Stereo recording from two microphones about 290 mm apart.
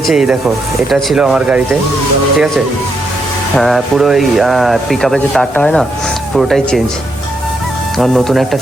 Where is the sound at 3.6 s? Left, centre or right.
Centre.